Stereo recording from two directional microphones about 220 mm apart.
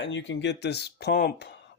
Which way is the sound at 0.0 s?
55° left (ahead or behind).